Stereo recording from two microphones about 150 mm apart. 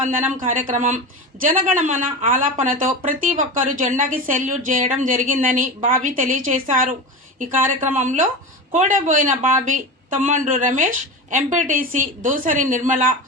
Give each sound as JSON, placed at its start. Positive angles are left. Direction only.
{"t": 0.0, "sound": "speech", "side_deg": -60}
{"t": 7.9, "sound": "speech", "side_deg": -60}